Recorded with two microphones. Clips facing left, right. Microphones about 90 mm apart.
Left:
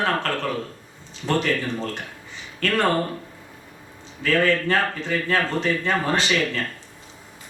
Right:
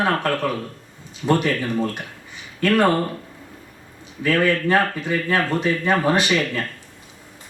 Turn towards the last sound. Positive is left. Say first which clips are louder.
# right 2 dB
turn(degrees=-15)  # may be behind; listen again after turning